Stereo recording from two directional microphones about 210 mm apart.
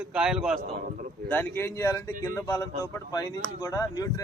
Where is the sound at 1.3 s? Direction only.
10° left (ahead or behind).